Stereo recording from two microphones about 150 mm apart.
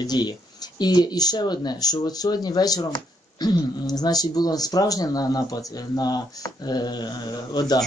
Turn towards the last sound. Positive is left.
turn(degrees=30)  # may be behind; listen again after turning